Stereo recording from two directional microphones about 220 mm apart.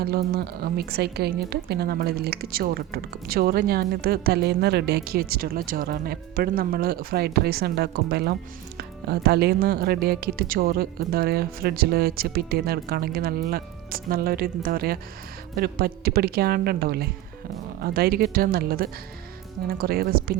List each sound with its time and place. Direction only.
0.0 s a woman's voice: 45° right (ahead or behind)